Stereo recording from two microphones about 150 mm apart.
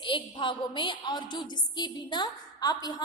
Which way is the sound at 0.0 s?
35° left (ahead or behind).